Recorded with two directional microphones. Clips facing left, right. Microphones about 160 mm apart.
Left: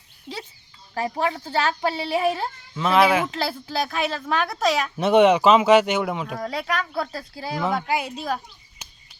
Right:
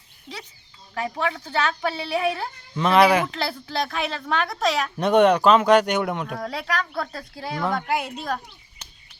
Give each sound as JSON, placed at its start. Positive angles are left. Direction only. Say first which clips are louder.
{"t": 0.3, "sound": "speech", "louder": "left 4 dB", "side_deg": 10}
{"t": 0.9, "sound": "speech", "louder": "left 2 dB", "side_deg": 35}
{"t": 2.7, "sound": "speech", "louder": "right 1 dB", "side_deg": 0}
{"t": 8.8, "sound": "a sound", "louder": "left 1 dB", "side_deg": 10}